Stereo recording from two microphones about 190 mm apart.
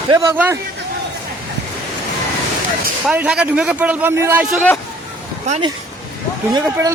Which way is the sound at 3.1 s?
5° right (ahead or behind).